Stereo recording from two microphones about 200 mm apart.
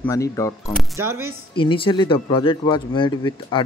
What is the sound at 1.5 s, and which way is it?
Speech, 25° left (ahead or behind).